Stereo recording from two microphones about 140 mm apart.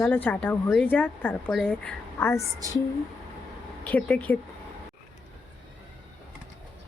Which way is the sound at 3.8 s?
10° left (ahead or behind).